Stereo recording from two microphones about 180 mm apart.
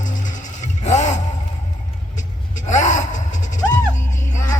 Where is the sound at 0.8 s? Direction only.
40° left (ahead or behind).